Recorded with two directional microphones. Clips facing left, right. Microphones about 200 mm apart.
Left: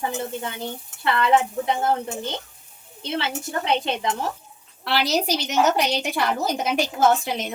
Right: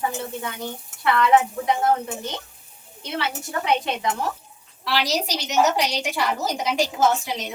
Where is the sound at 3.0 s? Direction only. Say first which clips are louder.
Left 1 dB; 25° left (ahead or behind).